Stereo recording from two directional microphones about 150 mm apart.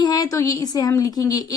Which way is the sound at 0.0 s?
25° left (ahead or behind).